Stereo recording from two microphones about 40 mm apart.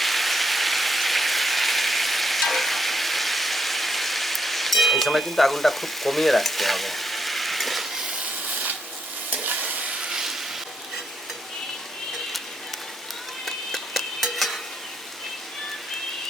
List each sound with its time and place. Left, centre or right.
0.0 s rain: centre
9.3 s stir: right
9.9 s train: centre
13.4 s a sound: centre